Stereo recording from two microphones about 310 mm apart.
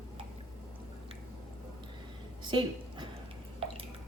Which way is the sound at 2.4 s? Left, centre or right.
Centre.